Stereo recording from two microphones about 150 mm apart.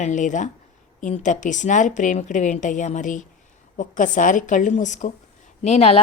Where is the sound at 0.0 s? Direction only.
55° left (ahead or behind).